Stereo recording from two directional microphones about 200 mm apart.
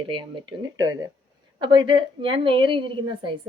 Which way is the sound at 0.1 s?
25° right (ahead or behind).